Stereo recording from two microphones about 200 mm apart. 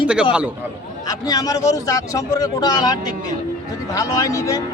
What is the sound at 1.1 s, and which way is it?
Speech, 15° left (ahead or behind).